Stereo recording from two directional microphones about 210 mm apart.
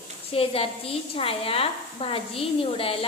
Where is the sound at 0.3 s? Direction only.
25° left (ahead or behind).